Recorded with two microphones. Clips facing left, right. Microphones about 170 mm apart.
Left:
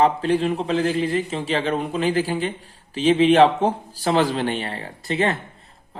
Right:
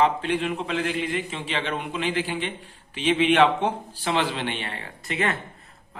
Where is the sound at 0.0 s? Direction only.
35° left (ahead or behind).